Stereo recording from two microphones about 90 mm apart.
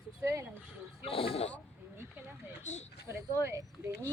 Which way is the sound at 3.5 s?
35° right (ahead or behind).